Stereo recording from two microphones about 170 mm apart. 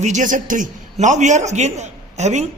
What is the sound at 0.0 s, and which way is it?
A man's voice, 45° right (ahead or behind).